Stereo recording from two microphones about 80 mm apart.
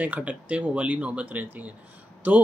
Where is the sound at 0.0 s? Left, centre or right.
Centre.